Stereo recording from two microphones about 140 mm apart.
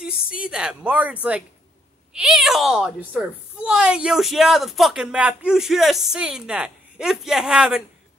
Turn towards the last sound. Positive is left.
turn(degrees=-5)  # may be behind; listen again after turning